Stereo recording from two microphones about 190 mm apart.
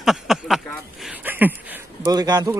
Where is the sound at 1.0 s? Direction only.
10° right (ahead or behind).